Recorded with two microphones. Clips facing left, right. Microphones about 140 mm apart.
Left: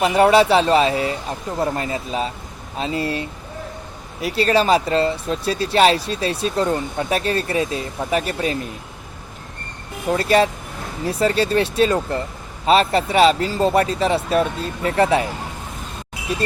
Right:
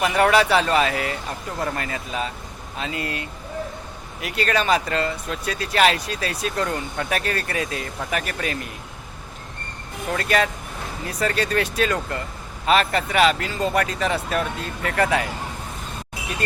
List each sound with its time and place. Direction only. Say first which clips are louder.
0.0 s speech: left 4 dB; 25° left (ahead or behind)
4.2 s speech: left 6 dB; 30° left (ahead or behind)
10.1 s speech: left 6 dB; 30° left (ahead or behind)